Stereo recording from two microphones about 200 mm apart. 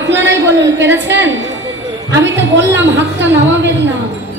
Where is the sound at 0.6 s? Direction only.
60° right (ahead or behind).